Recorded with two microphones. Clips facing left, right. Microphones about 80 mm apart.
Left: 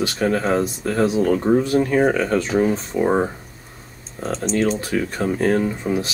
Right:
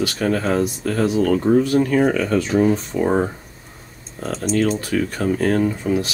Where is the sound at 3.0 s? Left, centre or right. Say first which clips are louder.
Left 1 dB; centre.